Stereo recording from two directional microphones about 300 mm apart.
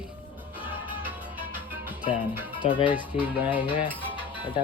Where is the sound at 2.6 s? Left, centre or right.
Centre.